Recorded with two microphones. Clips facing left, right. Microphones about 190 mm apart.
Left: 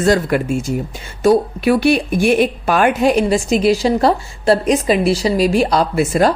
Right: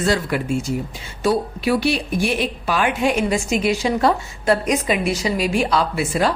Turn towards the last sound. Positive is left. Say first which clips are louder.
# left 6 dB
turn(degrees=45)  # may be behind; listen again after turning